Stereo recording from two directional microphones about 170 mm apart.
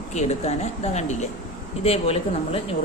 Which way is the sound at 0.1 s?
40° left (ahead or behind).